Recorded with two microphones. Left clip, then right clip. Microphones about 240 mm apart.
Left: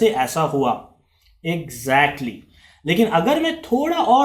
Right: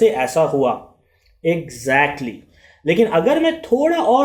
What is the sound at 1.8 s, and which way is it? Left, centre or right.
Speech, centre.